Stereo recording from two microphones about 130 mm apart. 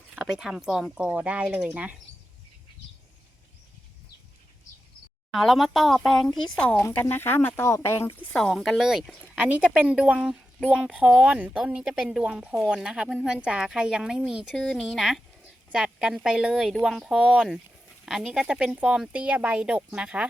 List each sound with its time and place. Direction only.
0.2 s speech: 5° right (ahead or behind)
5.3 s speech: centre (ahead or behind); by 8.2 s 20° left (ahead or behind)
8.3 s speech: centre (ahead or behind)